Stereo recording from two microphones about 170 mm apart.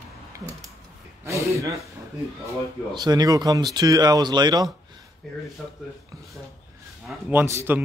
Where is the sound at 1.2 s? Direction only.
15° right (ahead or behind).